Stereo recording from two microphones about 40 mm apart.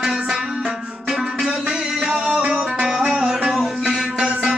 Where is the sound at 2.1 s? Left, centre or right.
Right.